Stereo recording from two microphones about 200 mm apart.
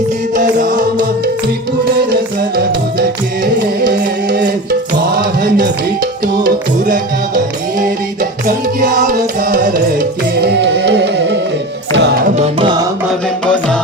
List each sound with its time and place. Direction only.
0.3 s music: 40° right (ahead or behind)
3.4 s music: 45° right (ahead or behind)
10.4 s music: 60° right (ahead or behind)
12.4 s tabla: 25° right (ahead or behind)
13.1 s music: 5° left (ahead or behind)